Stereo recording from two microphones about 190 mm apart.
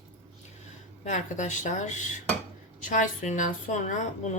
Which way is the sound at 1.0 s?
40° left (ahead or behind).